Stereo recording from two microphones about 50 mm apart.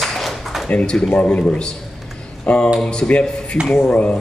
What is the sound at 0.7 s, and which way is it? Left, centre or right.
Speech, left.